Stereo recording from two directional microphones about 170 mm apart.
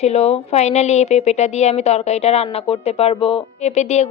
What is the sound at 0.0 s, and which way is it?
Speech, 40° left (ahead or behind).